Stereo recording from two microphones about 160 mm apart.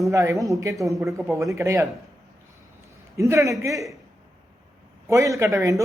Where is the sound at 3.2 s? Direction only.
20° right (ahead or behind).